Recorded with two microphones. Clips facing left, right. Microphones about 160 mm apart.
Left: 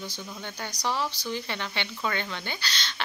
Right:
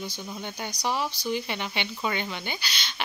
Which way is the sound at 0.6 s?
15° right (ahead or behind).